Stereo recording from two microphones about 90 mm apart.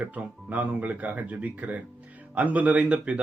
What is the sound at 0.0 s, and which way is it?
Speech, 20° right (ahead or behind).